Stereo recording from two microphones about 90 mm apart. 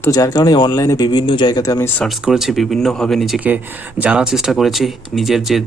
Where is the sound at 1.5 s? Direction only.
45° left (ahead or behind).